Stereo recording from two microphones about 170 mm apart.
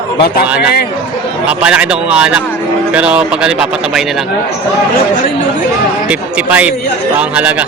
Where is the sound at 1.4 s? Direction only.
5° right (ahead or behind).